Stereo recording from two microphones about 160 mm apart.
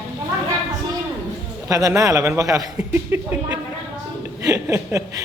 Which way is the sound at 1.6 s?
20° right (ahead or behind).